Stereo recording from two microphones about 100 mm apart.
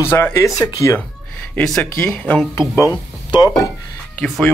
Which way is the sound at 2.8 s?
40° left (ahead or behind).